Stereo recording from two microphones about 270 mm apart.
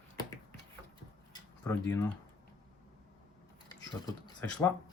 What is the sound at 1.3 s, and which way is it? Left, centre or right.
Tick-tock, centre.